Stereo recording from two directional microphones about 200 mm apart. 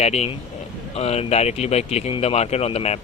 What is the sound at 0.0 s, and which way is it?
Speech, 30° left (ahead or behind).